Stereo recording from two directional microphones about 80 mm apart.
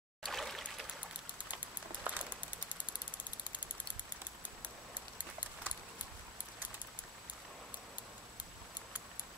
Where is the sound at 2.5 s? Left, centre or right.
Left.